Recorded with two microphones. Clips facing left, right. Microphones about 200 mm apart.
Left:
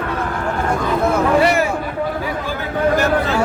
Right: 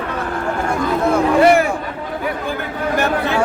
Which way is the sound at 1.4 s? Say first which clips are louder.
Right 4 dB; 55° right (ahead or behind).